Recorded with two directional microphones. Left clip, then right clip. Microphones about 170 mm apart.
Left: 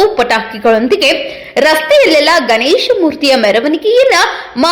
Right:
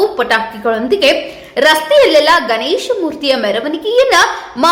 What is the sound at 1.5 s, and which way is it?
A woman's voice, 35° left (ahead or behind).